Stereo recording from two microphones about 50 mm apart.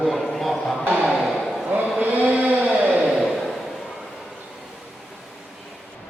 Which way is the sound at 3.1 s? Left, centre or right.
Centre.